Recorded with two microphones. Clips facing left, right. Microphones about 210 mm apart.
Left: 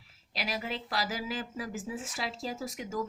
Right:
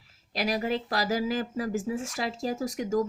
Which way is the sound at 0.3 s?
45° right (ahead or behind).